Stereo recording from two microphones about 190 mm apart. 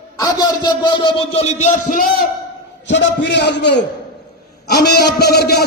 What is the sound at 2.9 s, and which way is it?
A man's voice, 65° left (ahead or behind).